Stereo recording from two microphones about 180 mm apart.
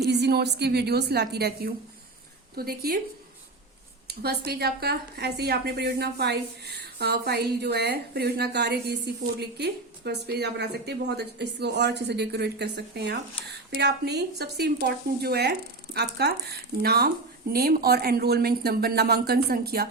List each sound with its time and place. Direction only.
0.0 s a woman's voice: 65° right (ahead or behind)
4.2 s a woman's voice: 60° right (ahead or behind)